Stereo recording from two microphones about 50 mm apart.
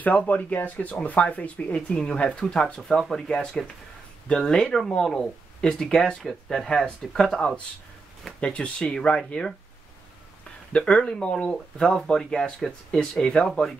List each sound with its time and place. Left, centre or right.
0.0 s speech: left; by 7.5 s centre
8.4 s speech: left
10.9 s speech: centre